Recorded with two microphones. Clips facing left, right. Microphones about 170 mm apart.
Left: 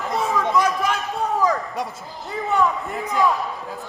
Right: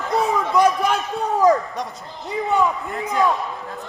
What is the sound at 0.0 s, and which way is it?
Run, centre (ahead or behind).